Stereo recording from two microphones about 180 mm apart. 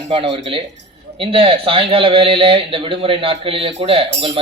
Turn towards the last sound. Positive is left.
turn(degrees=-30)  # may be behind; listen again after turning